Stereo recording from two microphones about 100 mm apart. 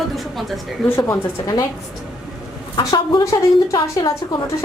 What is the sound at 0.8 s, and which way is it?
Speech, 25° left (ahead or behind).